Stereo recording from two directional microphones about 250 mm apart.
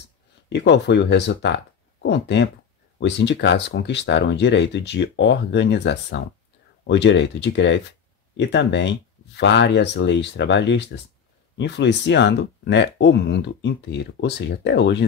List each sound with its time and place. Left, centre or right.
0.5 s speech: left